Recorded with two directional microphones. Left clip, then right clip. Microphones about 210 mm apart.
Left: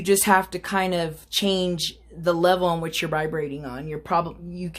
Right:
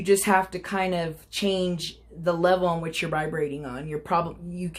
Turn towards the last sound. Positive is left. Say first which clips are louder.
# left 1 dB
turn(degrees=20)  # may be behind; listen again after turning